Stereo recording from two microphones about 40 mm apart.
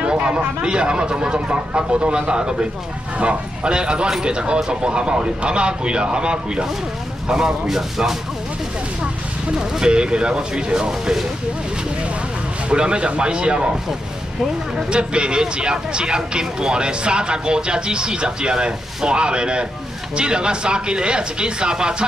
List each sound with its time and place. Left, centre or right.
0.0 s a sound: right
0.6 s speech: right
7.2 s speech: centre
9.6 s speech: right
10.9 s speech: centre
12.6 s speech: right
14.9 s speech: right